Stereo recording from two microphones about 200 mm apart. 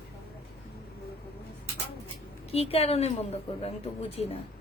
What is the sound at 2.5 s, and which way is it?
A woman's voice, 30° left (ahead or behind).